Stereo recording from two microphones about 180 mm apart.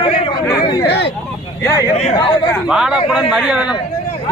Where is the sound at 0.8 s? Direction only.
70° left (ahead or behind).